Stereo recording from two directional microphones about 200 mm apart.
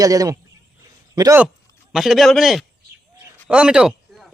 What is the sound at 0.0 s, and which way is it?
A man's voice, 20° right (ahead or behind).